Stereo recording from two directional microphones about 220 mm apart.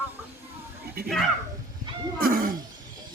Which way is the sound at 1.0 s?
45° right (ahead or behind).